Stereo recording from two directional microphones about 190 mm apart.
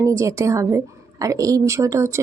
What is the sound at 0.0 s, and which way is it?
Speech, 15° right (ahead or behind).